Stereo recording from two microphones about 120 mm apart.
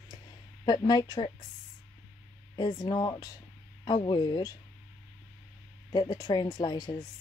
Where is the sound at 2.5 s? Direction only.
35° left (ahead or behind).